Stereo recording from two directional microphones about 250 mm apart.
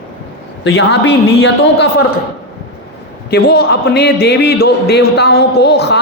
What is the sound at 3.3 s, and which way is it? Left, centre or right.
A man's voice, left.